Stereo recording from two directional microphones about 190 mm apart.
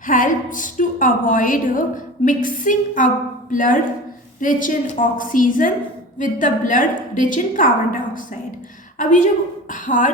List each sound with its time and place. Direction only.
0.1 s a woman's voice: 45° left (ahead or behind)